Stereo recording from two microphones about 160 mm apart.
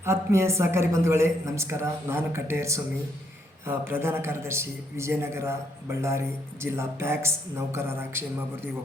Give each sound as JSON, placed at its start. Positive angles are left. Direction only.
{"t": 0.0, "sound": "a man's voice", "side_deg": -15}